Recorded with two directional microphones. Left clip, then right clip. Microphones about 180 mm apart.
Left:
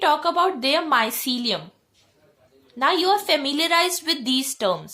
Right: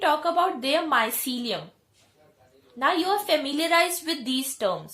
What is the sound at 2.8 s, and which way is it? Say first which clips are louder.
A woman's voice: left 4 dB; 35° left (ahead or behind).